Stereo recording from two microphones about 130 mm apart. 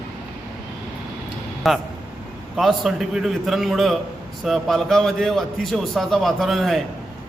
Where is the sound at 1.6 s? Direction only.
Centre (ahead or behind).